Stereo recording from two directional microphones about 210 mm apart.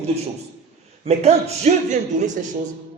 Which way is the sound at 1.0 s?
30° right (ahead or behind).